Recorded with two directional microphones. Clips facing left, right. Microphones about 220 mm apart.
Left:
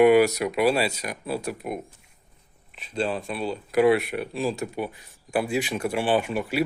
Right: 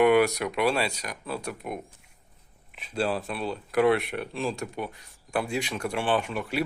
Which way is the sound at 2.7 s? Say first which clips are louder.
Left 1 dB; 5° right (ahead or behind).